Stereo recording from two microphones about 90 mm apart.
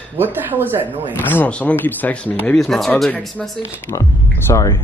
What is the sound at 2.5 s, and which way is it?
Speech, centre (ahead or behind).